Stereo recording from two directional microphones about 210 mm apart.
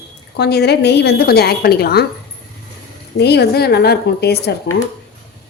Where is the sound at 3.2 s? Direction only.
50° left (ahead or behind).